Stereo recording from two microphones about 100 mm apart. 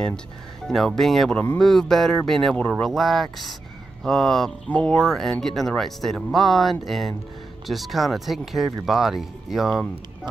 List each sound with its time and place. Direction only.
0.7 s speech: 5° left (ahead or behind)